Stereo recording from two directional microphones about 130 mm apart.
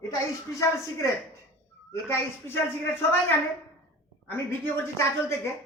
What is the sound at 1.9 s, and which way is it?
A woman's voice, 20° left (ahead or behind).